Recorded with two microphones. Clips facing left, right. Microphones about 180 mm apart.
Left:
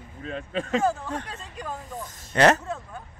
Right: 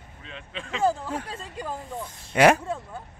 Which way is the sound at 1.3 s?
30° right (ahead or behind).